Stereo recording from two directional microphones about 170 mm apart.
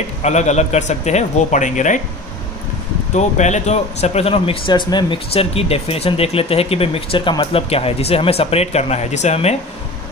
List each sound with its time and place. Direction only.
0.2 s a man's voice: 40° left (ahead or behind)
3.2 s speech: 45° left (ahead or behind)